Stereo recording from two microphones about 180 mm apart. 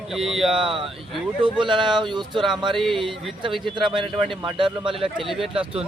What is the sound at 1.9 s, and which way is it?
Speech, 25° right (ahead or behind).